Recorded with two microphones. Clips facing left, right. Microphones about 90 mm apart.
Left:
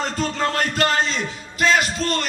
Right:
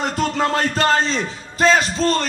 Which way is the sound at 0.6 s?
30° right (ahead or behind).